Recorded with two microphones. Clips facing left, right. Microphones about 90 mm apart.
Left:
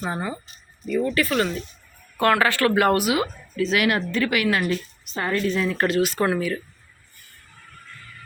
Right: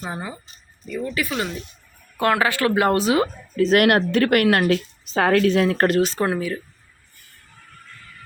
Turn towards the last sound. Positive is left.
turn(degrees=-20)  # may be behind; listen again after turning